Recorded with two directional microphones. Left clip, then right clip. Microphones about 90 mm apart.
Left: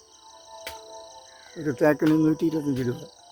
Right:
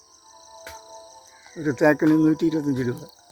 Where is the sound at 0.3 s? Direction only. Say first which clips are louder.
Left 1 dB; 15° right (ahead or behind).